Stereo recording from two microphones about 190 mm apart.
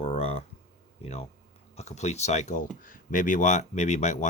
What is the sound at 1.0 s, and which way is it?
Speech, 35° left (ahead or behind).